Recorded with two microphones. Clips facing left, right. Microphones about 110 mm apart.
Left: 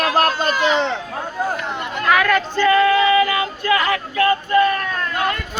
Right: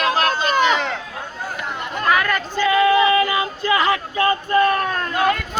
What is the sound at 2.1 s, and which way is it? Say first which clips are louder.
Female singing: left 3 dB; 5° right (ahead or behind).